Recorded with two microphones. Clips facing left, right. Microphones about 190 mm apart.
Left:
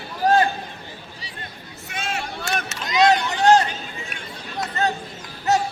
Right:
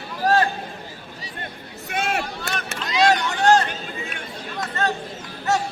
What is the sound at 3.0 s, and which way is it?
Vehicle, 20° left (ahead or behind).